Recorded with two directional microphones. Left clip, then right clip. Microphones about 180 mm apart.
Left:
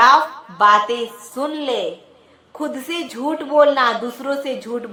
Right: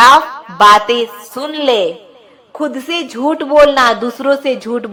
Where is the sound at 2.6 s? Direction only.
20° right (ahead or behind).